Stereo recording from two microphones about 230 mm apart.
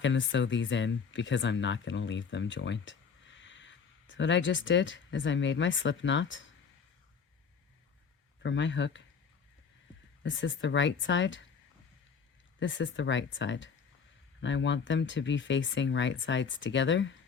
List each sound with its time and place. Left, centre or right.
0.0 s speech: left
8.4 s speech: left
10.2 s speech: left
12.5 s speech: left